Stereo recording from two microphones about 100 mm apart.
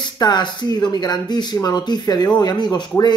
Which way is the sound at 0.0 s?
45° left (ahead or behind).